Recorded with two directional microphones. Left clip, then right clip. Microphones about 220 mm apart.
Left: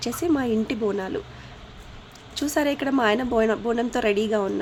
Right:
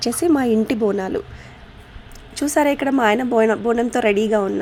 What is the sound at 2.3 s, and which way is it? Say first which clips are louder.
A woman's voice: right 6 dB; 15° right (ahead or behind).